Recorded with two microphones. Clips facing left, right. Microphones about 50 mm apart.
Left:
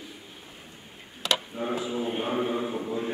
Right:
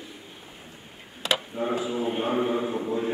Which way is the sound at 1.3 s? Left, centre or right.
Centre.